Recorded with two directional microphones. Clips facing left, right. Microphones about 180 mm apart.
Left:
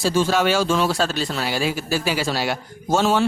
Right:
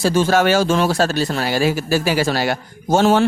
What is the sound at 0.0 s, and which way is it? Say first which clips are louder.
Speech: right 4 dB; 55° right (ahead or behind).